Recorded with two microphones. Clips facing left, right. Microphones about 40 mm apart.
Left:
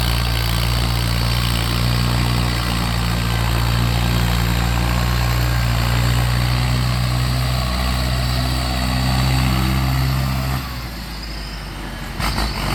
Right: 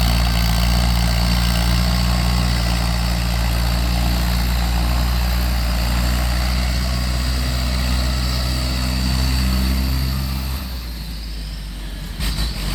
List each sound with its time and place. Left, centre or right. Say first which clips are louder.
0.0 s vehicle: right 1 dB; centre; by 6.5 s left
9.0 s vehicle: left 4 dB; left